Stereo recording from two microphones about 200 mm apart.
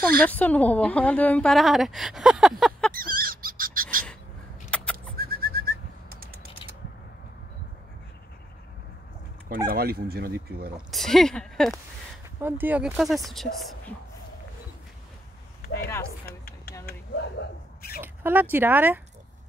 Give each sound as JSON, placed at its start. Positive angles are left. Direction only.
{"t": 0.3, "sound": "a woman's voice", "side_deg": 5}
{"t": 2.9, "sound": "owl", "side_deg": -45}
{"t": 4.6, "sound": "a sound", "side_deg": 5}
{"t": 4.9, "sound": "bird", "side_deg": -50}
{"t": 9.7, "sound": "speech", "side_deg": -50}
{"t": 10.9, "sound": "a woman's voice", "side_deg": 0}
{"t": 12.4, "sound": "a woman's voice", "side_deg": -10}
{"t": 16.3, "sound": "a sound", "side_deg": 50}
{"t": 18.0, "sound": "speech", "side_deg": -10}